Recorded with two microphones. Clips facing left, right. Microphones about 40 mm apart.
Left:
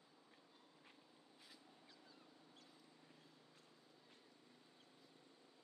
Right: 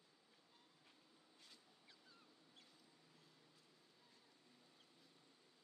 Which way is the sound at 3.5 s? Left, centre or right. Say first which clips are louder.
Left 4 dB; left.